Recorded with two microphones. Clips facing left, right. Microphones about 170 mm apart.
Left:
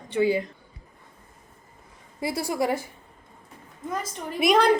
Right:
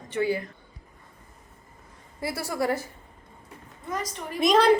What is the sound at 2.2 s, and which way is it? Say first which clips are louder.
Speech: left 2 dB; 15° left (ahead or behind).